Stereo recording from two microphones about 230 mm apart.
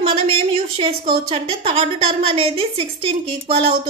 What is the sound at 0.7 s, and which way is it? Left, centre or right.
A woman's voice, right.